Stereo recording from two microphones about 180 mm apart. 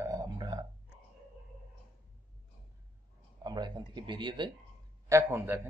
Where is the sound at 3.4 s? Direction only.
25° right (ahead or behind).